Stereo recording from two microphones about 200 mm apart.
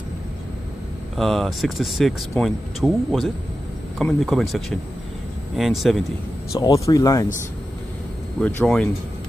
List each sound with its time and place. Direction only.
1.1 s speech: centre (ahead or behind)
6.5 s speech: 15° left (ahead or behind)
8.4 s speech: 5° left (ahead or behind)